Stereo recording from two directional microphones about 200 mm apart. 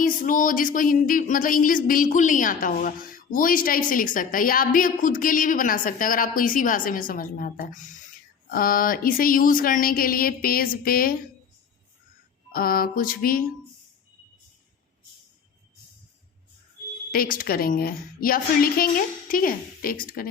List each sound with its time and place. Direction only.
0.0 s speech: 40° left (ahead or behind)
12.5 s speech: 45° left (ahead or behind)
17.1 s speech: 45° left (ahead or behind)